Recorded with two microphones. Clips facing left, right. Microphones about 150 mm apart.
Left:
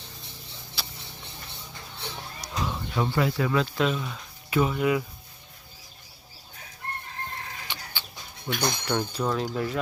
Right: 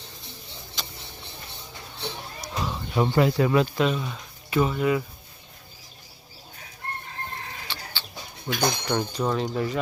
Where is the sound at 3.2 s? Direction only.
35° right (ahead or behind).